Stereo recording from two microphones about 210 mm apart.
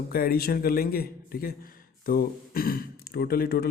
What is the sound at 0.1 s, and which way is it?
A man's voice, 45° left (ahead or behind).